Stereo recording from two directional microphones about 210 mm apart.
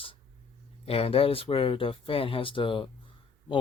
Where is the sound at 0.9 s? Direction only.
30° left (ahead or behind).